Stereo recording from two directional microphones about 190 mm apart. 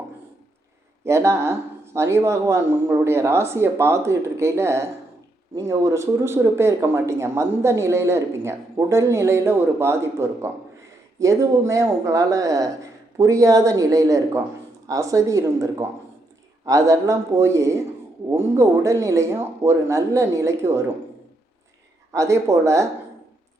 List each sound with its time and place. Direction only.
1.0 s speech: 15° right (ahead or behind)
22.1 s speech: 15° right (ahead or behind)